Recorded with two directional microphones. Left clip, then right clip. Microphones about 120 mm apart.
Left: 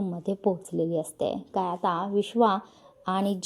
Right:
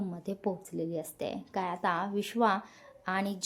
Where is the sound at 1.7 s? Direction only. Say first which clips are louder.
Left 3 dB; 35° right (ahead or behind).